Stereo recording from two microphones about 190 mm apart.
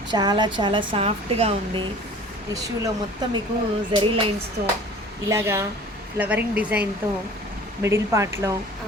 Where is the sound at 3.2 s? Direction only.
20° right (ahead or behind).